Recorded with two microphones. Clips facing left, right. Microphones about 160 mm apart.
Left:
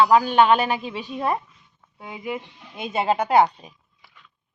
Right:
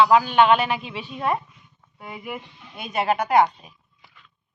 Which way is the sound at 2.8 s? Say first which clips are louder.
Left 1 dB; 25° left (ahead or behind).